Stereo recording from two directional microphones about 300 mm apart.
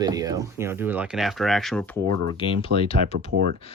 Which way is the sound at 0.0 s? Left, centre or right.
Centre.